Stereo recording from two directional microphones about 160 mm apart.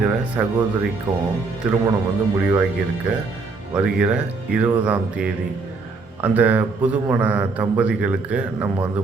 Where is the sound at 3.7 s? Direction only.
5° right (ahead or behind).